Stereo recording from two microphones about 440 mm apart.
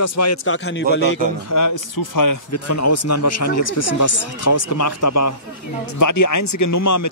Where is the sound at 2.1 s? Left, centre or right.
Left.